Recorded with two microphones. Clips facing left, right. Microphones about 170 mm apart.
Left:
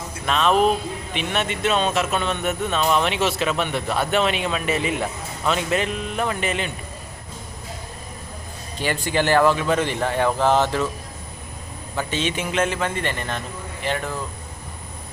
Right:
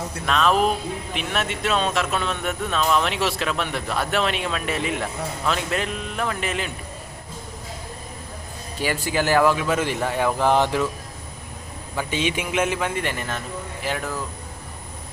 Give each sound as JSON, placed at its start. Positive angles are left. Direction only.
{"t": 0.3, "sound": "speech", "side_deg": 0}
{"t": 8.8, "sound": "speech", "side_deg": -5}
{"t": 11.9, "sound": "speech", "side_deg": -10}